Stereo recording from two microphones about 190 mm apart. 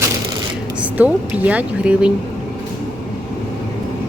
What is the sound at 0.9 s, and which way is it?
Speech, 10° right (ahead or behind).